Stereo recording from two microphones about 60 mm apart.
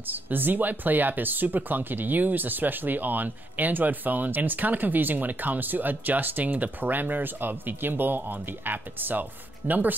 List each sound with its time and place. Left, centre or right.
0.0 s speech: right